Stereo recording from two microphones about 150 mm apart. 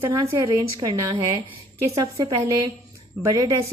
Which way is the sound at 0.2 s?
25° right (ahead or behind).